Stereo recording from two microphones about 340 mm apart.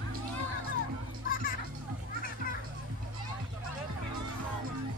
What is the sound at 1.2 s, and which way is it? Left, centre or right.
Children playing, left.